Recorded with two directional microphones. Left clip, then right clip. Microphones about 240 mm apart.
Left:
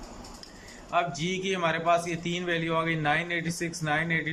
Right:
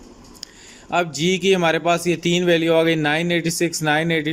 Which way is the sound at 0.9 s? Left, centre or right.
Right.